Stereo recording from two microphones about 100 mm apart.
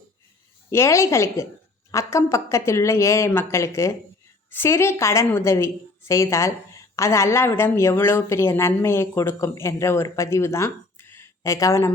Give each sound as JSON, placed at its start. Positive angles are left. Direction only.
{"t": 0.7, "sound": "a woman's voice", "side_deg": 30}